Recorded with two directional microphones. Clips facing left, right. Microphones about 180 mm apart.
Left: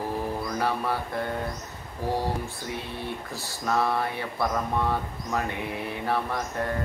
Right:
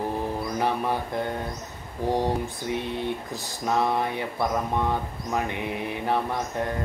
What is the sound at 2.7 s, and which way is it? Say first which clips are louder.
Speech: right 7 dB; 20° right (ahead or behind).